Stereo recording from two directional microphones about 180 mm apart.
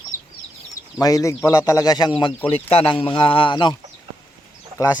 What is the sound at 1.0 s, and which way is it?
A man's voice, 20° left (ahead or behind).